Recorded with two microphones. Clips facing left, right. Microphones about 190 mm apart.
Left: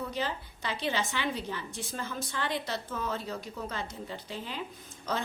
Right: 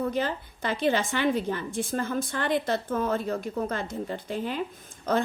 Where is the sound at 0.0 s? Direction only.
50° right (ahead or behind).